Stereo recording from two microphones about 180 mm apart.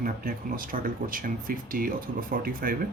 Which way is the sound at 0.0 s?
50° right (ahead or behind).